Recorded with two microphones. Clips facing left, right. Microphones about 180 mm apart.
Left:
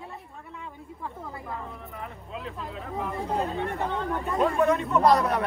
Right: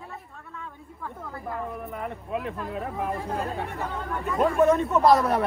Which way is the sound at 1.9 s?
60° right (ahead or behind).